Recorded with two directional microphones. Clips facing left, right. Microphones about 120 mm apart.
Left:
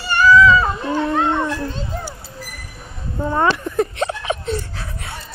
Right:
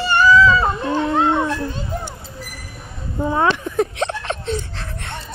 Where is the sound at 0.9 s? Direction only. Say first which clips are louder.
Right 1 dB; 10° right (ahead or behind).